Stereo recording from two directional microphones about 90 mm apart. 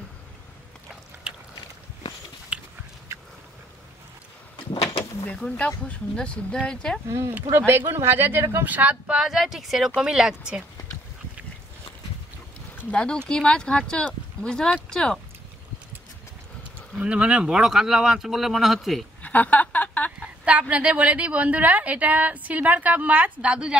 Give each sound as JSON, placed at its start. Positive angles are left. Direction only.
{"t": 2.5, "sound": "biting", "side_deg": -10}
{"t": 5.8, "sound": "speech", "side_deg": 10}
{"t": 7.1, "sound": "a woman's voice", "side_deg": -30}
{"t": 12.9, "sound": "speech", "side_deg": 10}
{"t": 16.9, "sound": "speech", "side_deg": -10}
{"t": 19.2, "sound": "a sound", "side_deg": 15}
{"t": 20.4, "sound": "a woman's voice", "side_deg": -15}